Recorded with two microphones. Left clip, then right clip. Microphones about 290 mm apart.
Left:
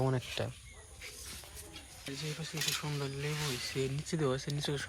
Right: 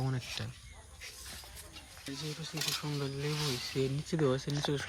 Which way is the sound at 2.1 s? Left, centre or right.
Centre.